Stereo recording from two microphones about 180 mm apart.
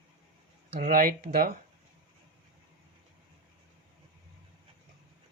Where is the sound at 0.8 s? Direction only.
55° right (ahead or behind).